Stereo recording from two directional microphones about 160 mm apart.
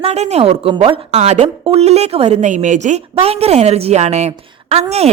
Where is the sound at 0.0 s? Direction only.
40° right (ahead or behind).